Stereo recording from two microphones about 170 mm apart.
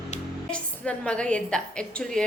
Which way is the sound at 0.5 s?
5° left (ahead or behind).